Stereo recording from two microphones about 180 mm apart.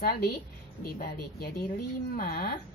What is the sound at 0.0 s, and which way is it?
Speech, 60° left (ahead or behind).